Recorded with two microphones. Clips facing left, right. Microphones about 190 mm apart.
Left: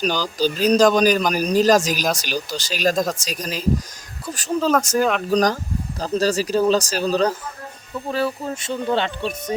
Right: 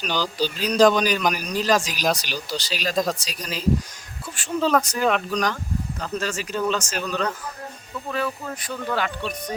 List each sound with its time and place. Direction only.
0.0 s speech: 45° left (ahead or behind)
2.9 s speech: centre (ahead or behind)
3.2 s speech: 45° left (ahead or behind); by 9.1 s 25° left (ahead or behind)